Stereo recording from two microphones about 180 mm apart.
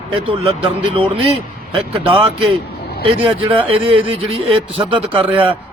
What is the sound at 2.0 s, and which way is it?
A man's voice, 25° right (ahead or behind).